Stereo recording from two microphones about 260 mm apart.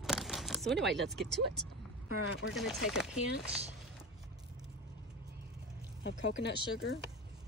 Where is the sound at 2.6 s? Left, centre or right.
Centre.